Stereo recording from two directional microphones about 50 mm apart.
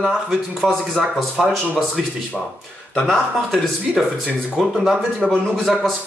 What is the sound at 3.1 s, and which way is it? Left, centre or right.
Speech, centre.